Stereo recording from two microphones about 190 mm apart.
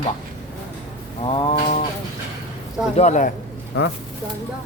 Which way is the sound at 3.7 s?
60° left (ahead or behind).